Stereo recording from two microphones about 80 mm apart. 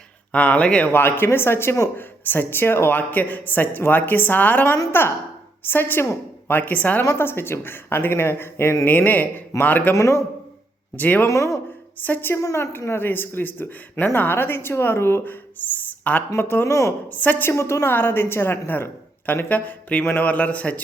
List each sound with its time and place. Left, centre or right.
0.3 s speech: centre
0.9 s speech: left
7.2 s speech: left
9.9 s speech: left
10.9 s speech: left
11.3 s speech: left
11.9 s speech: left
12.3 s speech: left
17.1 s speech: left
17.5 s speech: left; by 20.8 s centre